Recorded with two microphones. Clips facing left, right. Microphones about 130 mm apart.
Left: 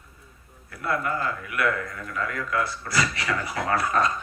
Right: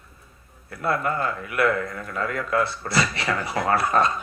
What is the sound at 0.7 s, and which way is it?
A man's voice, 35° right (ahead or behind).